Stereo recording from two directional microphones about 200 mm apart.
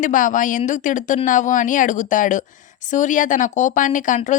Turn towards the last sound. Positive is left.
turn(degrees=40)  # may be behind; listen again after turning